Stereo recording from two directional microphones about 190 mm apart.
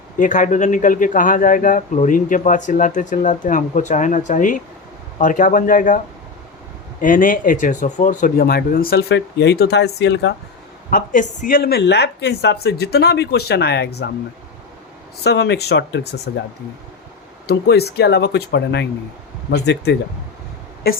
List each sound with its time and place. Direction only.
0.2 s a man's voice: 40° left (ahead or behind)
7.0 s a man's voice: 45° left (ahead or behind); by 10.3 s 65° left (ahead or behind)
10.9 s speech: 45° left (ahead or behind); by 14.1 s 65° left (ahead or behind)
15.2 s speech: 60° left (ahead or behind)
17.4 s speech: 60° left (ahead or behind)